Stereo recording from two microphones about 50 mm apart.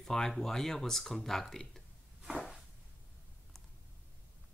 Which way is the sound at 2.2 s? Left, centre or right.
Centre.